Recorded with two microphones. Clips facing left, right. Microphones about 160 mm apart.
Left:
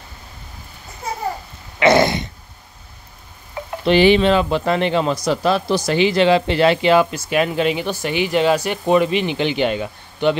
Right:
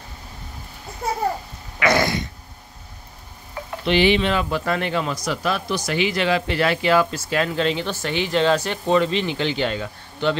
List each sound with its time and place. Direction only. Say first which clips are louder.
1.8 s a sound: left 6 dB; 25° left (ahead or behind)
3.8 s speech: left 5 dB; 40° left (ahead or behind)
4.3 s speech: left 6 dB; 25° left (ahead or behind)